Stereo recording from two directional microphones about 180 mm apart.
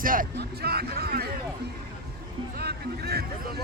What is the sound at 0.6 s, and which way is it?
Speech, 60° right (ahead or behind).